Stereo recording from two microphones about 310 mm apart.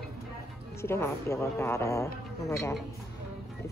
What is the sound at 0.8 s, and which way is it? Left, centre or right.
A woman's voice, centre.